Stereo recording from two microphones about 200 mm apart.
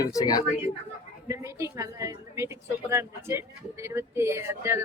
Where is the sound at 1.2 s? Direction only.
15° right (ahead or behind).